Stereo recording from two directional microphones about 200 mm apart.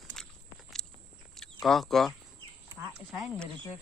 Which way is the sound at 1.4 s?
Centre (ahead or behind).